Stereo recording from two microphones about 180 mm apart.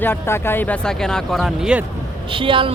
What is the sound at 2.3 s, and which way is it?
Speech, 30° right (ahead or behind).